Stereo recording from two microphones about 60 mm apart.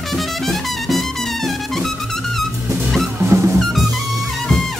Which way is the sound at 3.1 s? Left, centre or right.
Right.